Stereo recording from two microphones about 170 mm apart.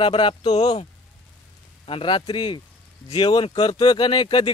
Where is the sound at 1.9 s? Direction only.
30° left (ahead or behind).